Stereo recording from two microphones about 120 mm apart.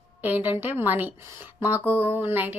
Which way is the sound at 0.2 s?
15° right (ahead or behind).